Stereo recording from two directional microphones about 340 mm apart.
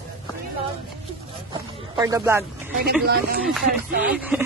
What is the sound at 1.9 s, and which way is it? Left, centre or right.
Speech, centre.